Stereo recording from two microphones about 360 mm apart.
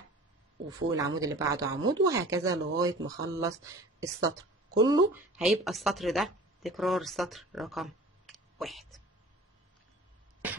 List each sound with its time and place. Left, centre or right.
0.9 s speech: centre
1.8 s speech: right
2.3 s speech: centre